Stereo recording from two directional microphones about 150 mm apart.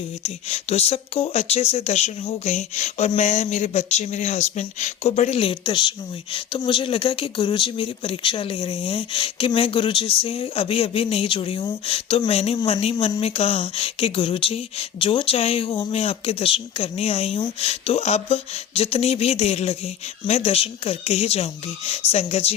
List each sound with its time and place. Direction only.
0.2 s speech: 45° left (ahead or behind)